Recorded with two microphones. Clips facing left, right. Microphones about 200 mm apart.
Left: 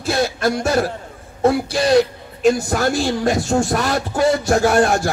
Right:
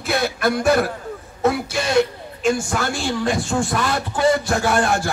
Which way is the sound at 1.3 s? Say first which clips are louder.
Left 4 dB; 30° left (ahead or behind).